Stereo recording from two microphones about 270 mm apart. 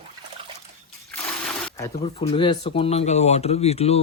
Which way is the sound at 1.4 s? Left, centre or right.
Centre.